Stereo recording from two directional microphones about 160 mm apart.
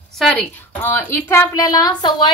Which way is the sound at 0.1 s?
5° left (ahead or behind).